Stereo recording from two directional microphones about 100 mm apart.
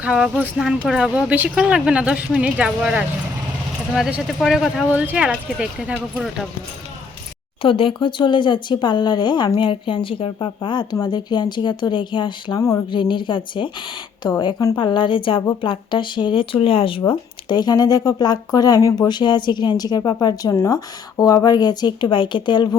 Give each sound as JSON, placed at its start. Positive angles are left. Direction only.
{"t": 0.0, "sound": "speech", "side_deg": -5}
{"t": 4.3, "sound": "speech", "side_deg": 0}
{"t": 7.6, "sound": "speech", "side_deg": 60}
{"t": 12.5, "sound": "speech", "side_deg": 35}
{"t": 12.9, "sound": "speech", "side_deg": 55}
{"t": 14.3, "sound": "speech", "side_deg": 40}
{"t": 14.8, "sound": "speech", "side_deg": 55}
{"t": 17.1, "sound": "speech", "side_deg": 45}